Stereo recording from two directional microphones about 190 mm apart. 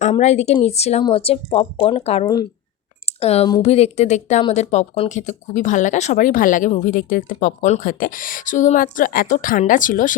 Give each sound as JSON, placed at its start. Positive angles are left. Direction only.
{"t": 0.0, "sound": "a woman's voice", "side_deg": 35}
{"t": 2.2, "sound": "a woman's voice", "side_deg": 20}
{"t": 3.2, "sound": "a woman's voice", "side_deg": 35}